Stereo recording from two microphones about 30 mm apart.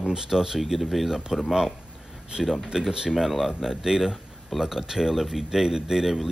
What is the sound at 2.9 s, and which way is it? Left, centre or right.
Speech, right.